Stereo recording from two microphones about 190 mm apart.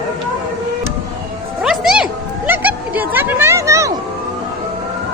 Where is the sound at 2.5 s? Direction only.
10° right (ahead or behind).